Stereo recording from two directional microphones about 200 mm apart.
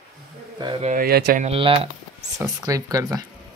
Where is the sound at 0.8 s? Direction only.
45° right (ahead or behind).